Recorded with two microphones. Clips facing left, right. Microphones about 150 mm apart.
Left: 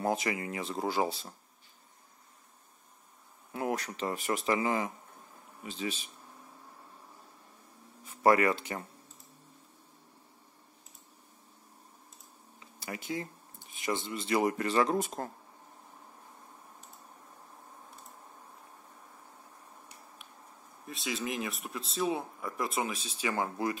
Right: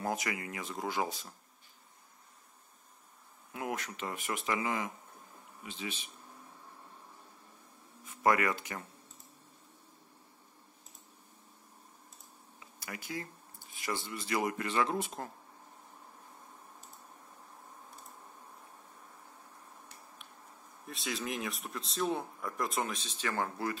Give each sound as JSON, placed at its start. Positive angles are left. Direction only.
{"t": 0.0, "sound": "speech", "side_deg": 25}
{"t": 3.5, "sound": "speech", "side_deg": 35}
{"t": 8.0, "sound": "speech", "side_deg": 30}
{"t": 12.5, "sound": "speech", "side_deg": 25}
{"t": 20.8, "sound": "speech", "side_deg": 0}